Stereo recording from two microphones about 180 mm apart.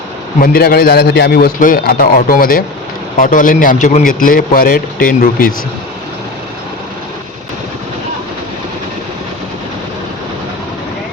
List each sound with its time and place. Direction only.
0.3 s a man's voice: 55° left (ahead or behind)